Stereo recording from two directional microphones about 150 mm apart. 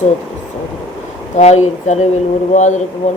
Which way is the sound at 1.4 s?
50° left (ahead or behind).